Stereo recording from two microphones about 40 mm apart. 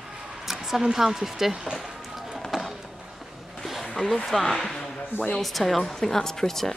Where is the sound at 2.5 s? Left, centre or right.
Centre.